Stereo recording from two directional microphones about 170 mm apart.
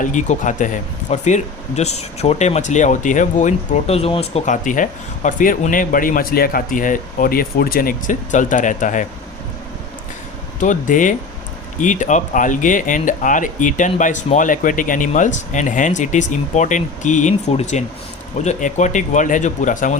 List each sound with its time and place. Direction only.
0.0 s speech: 45° left (ahead or behind)
10.6 s speech: 50° left (ahead or behind)